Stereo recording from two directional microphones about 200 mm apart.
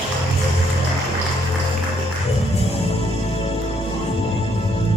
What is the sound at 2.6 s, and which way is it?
Music, 30° left (ahead or behind).